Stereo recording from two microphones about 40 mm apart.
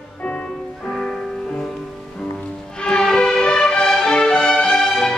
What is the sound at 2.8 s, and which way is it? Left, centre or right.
Music, centre.